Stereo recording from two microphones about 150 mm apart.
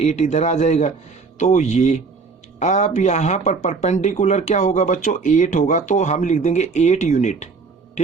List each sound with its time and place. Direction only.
0.0 s speech: 50° left (ahead or behind)